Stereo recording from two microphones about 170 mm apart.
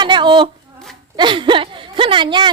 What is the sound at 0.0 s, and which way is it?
A woman's voice, 25° right (ahead or behind).